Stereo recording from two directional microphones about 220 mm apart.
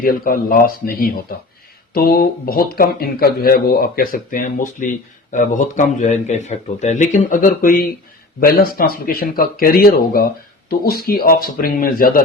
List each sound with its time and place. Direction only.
0.0 s speech: 40° left (ahead or behind)